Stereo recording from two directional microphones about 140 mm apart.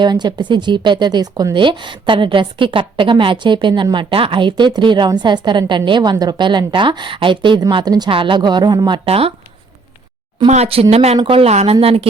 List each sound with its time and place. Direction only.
0.0 s speech: 30° right (ahead or behind)
9.0 s a woman's voice: 45° right (ahead or behind)
10.5 s a woman's voice: 45° right (ahead or behind)